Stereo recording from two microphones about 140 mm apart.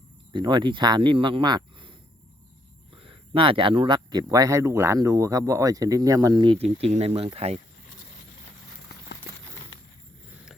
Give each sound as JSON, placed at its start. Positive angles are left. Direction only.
{"t": 0.3, "sound": "speech", "side_deg": -35}
{"t": 6.6, "sound": "speech", "side_deg": -45}